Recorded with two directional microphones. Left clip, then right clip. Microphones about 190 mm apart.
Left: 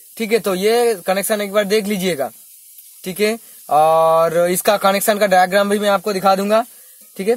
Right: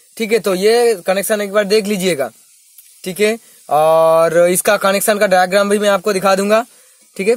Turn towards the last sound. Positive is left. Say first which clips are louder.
# right 4 dB
turn(degrees=-25)  # may be behind; listen again after turning